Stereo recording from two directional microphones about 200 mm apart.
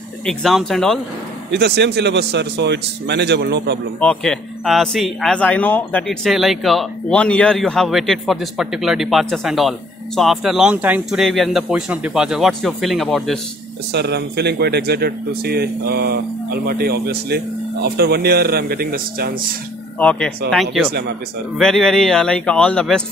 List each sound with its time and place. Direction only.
0.2 s speech: centre (ahead or behind)
1.5 s a man's voice: 60° right (ahead or behind)
4.0 s speech: 5° left (ahead or behind)
13.9 s speech: 55° right (ahead or behind)
20.0 s speech: 5° left (ahead or behind)